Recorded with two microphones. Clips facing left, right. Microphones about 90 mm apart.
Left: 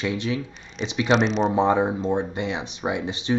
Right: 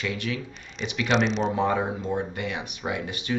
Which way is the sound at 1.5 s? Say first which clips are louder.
Left 5 dB; 20° left (ahead or behind).